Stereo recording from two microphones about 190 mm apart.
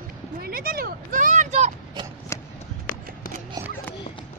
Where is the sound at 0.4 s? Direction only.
50° right (ahead or behind).